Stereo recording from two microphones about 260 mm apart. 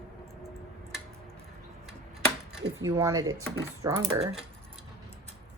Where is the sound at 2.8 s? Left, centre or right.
Centre.